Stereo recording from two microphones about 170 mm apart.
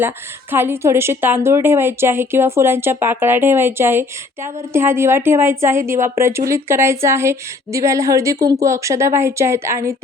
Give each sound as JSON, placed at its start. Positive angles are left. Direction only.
{"t": 0.5, "sound": "a woman's voice", "side_deg": -15}